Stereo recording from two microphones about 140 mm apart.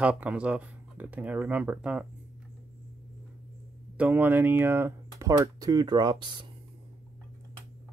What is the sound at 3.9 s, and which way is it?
Speech, 10° right (ahead or behind).